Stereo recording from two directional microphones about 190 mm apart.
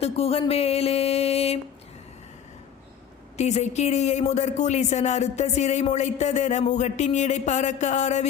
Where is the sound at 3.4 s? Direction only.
35° left (ahead or behind).